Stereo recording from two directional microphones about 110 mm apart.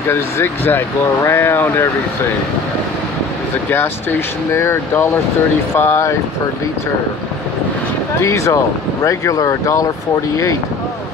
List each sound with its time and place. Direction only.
0.1 s speech: 20° left (ahead or behind)
4.5 s speech: 25° left (ahead or behind)
8.2 s speech: 25° left (ahead or behind)